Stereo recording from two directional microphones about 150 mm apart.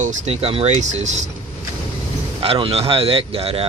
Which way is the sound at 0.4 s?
40° right (ahead or behind).